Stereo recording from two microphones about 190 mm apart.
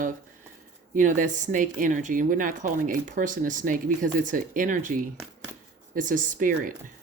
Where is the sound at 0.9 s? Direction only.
45° right (ahead or behind).